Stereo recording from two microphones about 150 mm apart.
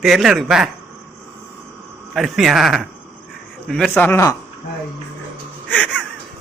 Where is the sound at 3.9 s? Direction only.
15° left (ahead or behind).